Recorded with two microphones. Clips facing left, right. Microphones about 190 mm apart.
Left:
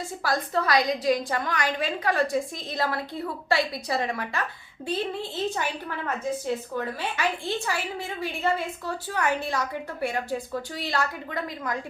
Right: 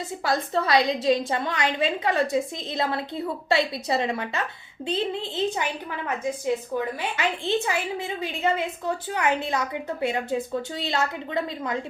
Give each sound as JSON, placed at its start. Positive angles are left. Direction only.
{"t": 0.2, "sound": "a woman's voice", "side_deg": -25}
{"t": 6.1, "sound": "a woman's voice", "side_deg": -15}